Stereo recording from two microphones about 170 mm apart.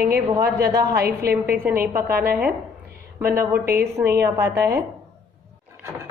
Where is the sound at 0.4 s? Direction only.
60° right (ahead or behind).